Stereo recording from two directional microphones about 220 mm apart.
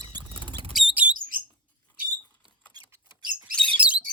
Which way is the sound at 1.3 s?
40° right (ahead or behind).